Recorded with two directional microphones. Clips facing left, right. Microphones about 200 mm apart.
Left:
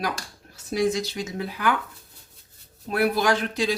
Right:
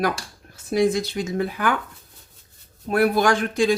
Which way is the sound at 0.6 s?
55° right (ahead or behind).